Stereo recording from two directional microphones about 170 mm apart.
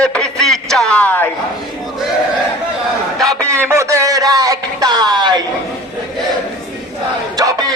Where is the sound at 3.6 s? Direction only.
15° right (ahead or behind).